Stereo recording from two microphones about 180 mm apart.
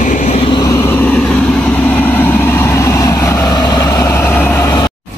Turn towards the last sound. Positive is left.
turn(degrees=10)  # may be behind; listen again after turning